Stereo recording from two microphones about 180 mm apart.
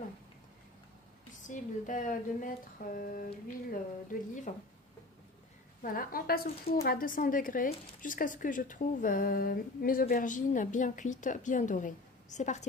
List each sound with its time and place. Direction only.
1.3 s speech: 45° left (ahead or behind)
5.8 s speech: 50° left (ahead or behind)